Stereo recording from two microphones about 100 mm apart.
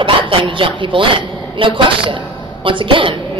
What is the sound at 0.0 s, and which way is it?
A woman's voice, 60° right (ahead or behind).